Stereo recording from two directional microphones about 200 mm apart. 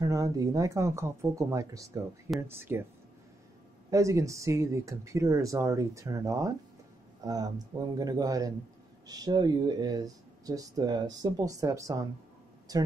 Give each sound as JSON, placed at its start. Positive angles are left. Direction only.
{"t": 0.0, "sound": "speech", "side_deg": -15}
{"t": 3.9, "sound": "speech", "side_deg": -15}